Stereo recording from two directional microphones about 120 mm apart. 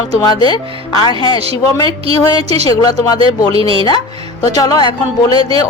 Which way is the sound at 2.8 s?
30° left (ahead or behind).